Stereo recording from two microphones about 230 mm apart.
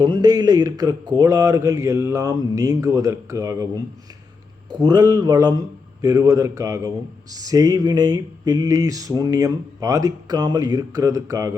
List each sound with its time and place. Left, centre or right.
0.0 s a man's voice: centre
4.7 s a man's voice: centre